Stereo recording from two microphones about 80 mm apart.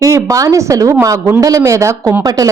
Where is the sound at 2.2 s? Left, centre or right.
Right.